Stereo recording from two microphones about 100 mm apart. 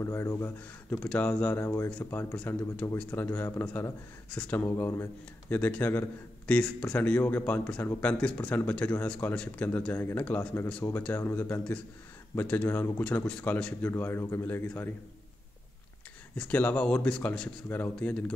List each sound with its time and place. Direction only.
0.0 s a man's voice: 25° left (ahead or behind)
0.9 s a man's voice: 10° left (ahead or behind)
4.7 s a man's voice: 25° left (ahead or behind)
13.0 s speech: 15° left (ahead or behind)
13.8 s a man's voice: 25° left (ahead or behind)
16.3 s speech: 15° left (ahead or behind)